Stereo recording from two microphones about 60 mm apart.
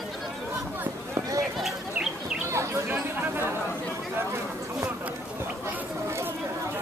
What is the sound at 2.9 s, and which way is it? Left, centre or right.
Chatter, right.